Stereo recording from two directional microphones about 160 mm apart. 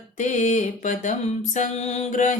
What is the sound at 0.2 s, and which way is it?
Music, 50° left (ahead or behind).